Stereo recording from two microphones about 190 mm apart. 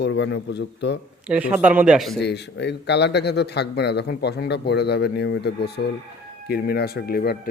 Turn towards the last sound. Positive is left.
turn(degrees=55)  # may be behind; listen again after turning